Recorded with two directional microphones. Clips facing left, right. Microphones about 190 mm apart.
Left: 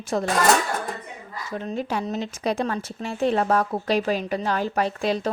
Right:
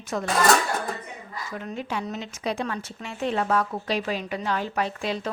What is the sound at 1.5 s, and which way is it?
Speech, 30° left (ahead or behind).